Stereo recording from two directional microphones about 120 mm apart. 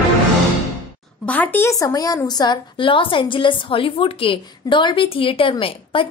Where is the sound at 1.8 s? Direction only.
30° left (ahead or behind).